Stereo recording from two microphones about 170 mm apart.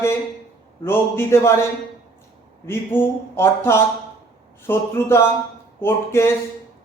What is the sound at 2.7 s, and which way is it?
A man's voice, 15° left (ahead or behind).